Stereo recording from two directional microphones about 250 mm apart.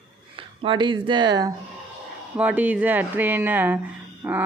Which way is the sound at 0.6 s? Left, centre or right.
Centre.